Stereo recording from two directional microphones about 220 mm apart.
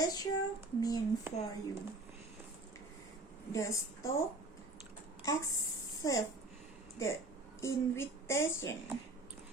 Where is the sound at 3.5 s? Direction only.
15° left (ahead or behind).